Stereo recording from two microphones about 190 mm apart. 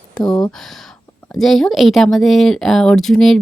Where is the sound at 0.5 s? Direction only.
Centre (ahead or behind).